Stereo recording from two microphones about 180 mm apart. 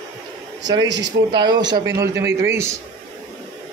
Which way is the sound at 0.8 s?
75° right (ahead or behind).